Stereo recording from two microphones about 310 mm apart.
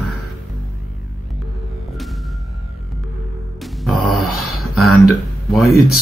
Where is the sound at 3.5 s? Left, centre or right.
Centre.